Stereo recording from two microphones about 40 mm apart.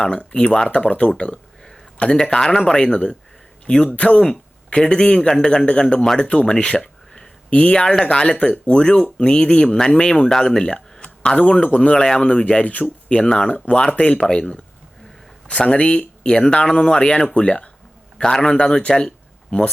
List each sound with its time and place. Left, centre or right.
0.0 s a man's voice: left
2.3 s a man's voice: centre
3.8 s a man's voice: left
18.2 s speech: centre